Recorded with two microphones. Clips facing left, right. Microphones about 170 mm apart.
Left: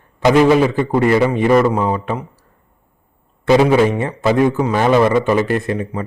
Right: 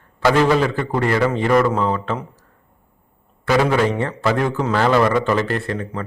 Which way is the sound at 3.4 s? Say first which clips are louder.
Left 5 dB; 25° left (ahead or behind).